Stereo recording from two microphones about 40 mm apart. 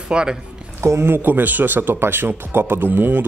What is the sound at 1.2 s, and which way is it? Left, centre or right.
Speech, right.